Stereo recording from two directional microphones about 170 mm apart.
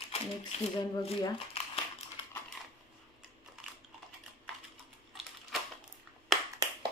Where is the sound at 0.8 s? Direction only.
25° left (ahead or behind).